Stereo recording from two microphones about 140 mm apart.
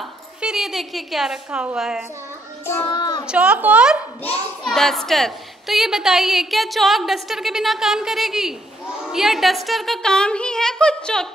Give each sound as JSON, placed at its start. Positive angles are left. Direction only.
{"t": 0.0, "sound": "a woman's voice", "side_deg": -5}
{"t": 2.6, "sound": "child singing", "side_deg": 15}
{"t": 2.9, "sound": "a child's voice", "side_deg": 30}
{"t": 3.3, "sound": "a woman's voice", "side_deg": -10}